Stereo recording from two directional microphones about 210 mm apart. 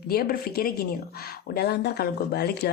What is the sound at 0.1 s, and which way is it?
Speech, 45° left (ahead or behind).